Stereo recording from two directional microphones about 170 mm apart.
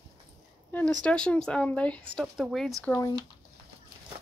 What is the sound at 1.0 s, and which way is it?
Speech, 5° left (ahead or behind).